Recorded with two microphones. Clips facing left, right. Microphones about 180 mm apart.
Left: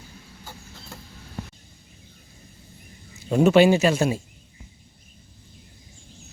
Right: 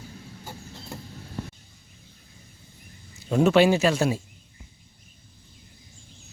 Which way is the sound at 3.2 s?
5° left (ahead or behind).